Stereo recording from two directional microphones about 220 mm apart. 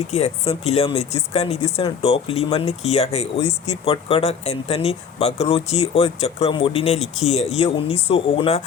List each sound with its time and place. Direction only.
0.1 s speech: 30° left (ahead or behind)